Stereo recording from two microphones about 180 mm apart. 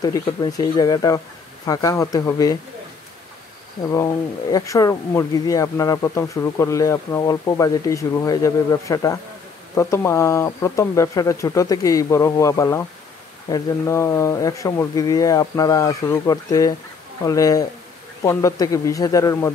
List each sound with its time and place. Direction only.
0.0 s speech: 20° left (ahead or behind)
3.9 s speech: 20° left (ahead or behind)